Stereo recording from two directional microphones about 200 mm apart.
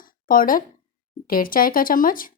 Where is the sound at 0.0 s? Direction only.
45° left (ahead or behind).